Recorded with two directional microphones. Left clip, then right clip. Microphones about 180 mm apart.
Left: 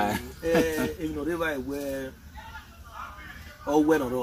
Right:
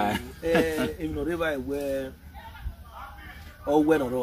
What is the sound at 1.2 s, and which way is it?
Speech, 25° right (ahead or behind).